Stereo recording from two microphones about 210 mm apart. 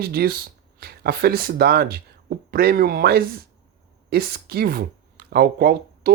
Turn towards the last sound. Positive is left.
turn(degrees=-45)  # may be behind; listen again after turning